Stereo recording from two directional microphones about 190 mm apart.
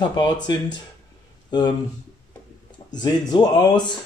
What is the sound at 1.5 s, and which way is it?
Speech, 25° left (ahead or behind).